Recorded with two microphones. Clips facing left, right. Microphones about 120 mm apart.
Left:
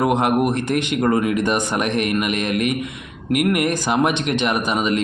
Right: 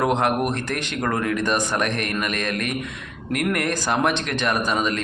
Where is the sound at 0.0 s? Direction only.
15° left (ahead or behind).